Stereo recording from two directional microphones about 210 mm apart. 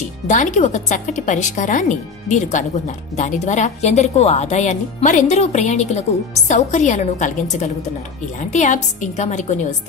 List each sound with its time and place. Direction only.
0.3 s a woman's voice: 35° left (ahead or behind)